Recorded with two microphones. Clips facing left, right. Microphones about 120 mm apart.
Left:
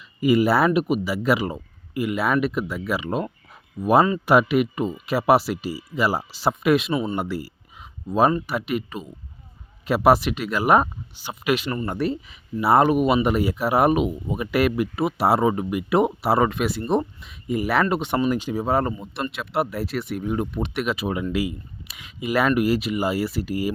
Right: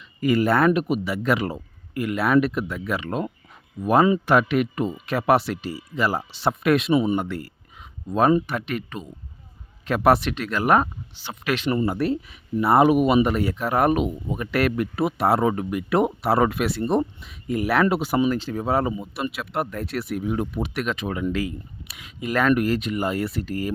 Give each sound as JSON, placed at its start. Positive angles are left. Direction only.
{"t": 0.2, "sound": "speech", "side_deg": 10}
{"t": 6.9, "sound": "speech", "side_deg": -15}
{"t": 7.2, "sound": "speech", "side_deg": 5}
{"t": 11.9, "sound": "speech", "side_deg": 0}
{"t": 18.3, "sound": "speech", "side_deg": 15}
{"t": 18.6, "sound": "speech", "side_deg": 0}
{"t": 20.8, "sound": "speech", "side_deg": 10}